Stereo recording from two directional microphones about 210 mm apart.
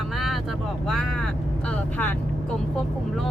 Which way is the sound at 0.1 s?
Centre (ahead or behind).